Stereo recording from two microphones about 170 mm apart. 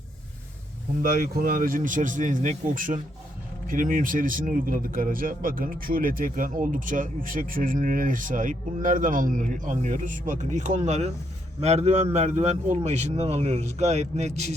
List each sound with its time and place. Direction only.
1.0 s a man's voice: 55° right (ahead or behind)